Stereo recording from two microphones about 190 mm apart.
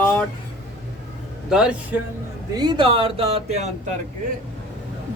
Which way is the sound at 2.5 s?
25° right (ahead or behind).